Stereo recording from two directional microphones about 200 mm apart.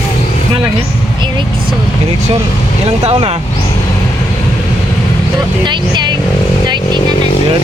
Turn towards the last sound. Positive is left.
turn(degrees=-20)  # may be behind; listen again after turning